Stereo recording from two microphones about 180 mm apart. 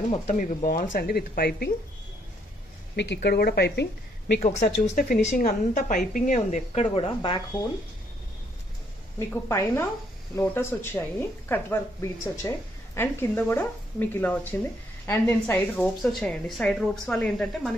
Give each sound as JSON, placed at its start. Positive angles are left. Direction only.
{"t": 0.1, "sound": "a woman's voice", "side_deg": 45}
{"t": 0.9, "sound": "speech", "side_deg": 55}
{"t": 3.0, "sound": "speech", "side_deg": 70}
{"t": 4.4, "sound": "a woman's voice", "side_deg": 40}
{"t": 7.2, "sound": "speech", "side_deg": 25}
{"t": 9.3, "sound": "speech", "side_deg": 15}